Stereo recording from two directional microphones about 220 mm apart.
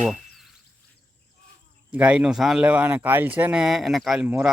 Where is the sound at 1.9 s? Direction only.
5° right (ahead or behind).